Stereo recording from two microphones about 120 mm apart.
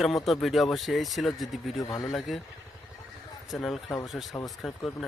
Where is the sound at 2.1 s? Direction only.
Centre (ahead or behind).